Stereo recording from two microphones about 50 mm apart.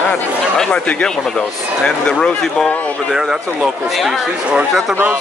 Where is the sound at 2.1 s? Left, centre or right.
Centre.